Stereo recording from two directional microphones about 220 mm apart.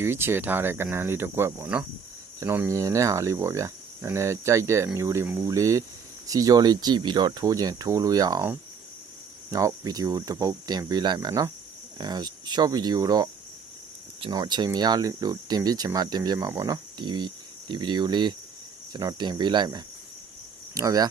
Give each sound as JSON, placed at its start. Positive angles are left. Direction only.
{"t": 0.0, "sound": "speech", "side_deg": -10}